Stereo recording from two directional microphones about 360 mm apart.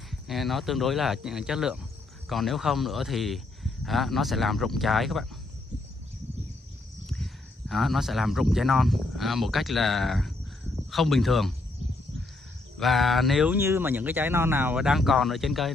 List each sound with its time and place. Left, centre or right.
0.1 s speech: centre
7.1 s speech: centre
12.7 s speech: centre